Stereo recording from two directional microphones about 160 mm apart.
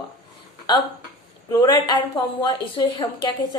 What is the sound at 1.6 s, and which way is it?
A woman's voice, 25° left (ahead or behind).